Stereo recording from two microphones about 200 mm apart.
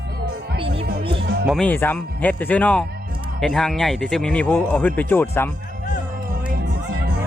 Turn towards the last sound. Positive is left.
turn(degrees=10)  # may be behind; listen again after turning